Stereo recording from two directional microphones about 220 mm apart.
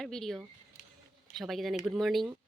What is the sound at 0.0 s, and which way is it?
Speech, centre (ahead or behind).